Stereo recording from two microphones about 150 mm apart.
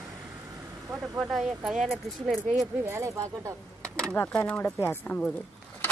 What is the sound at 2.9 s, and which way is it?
Speech, 20° right (ahead or behind).